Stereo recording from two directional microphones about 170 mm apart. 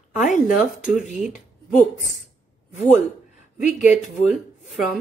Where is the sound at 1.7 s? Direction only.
50° left (ahead or behind).